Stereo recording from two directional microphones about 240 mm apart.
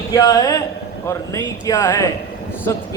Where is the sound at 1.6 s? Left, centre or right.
Centre.